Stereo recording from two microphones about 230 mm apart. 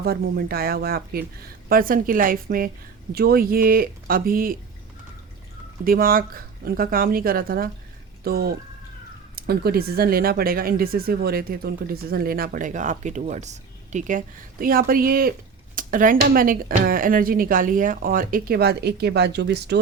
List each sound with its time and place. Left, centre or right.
0.0 s speech: right
5.8 s speech: right